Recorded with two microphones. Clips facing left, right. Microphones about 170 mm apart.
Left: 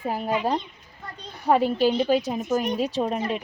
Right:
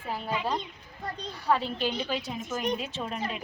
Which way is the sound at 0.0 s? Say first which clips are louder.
Left 7 dB; 45° left (ahead or behind).